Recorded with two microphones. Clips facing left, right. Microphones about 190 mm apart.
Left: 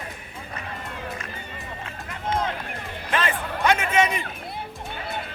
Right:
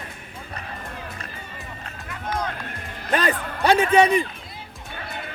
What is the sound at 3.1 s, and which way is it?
A man's voice, 40° right (ahead or behind).